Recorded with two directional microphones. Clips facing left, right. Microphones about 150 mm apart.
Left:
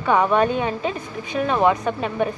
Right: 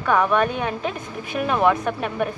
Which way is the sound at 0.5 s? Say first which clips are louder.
Left 2 dB; 5° right (ahead or behind).